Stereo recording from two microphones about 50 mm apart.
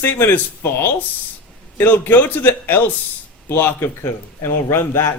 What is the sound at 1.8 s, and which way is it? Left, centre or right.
A man's voice, left.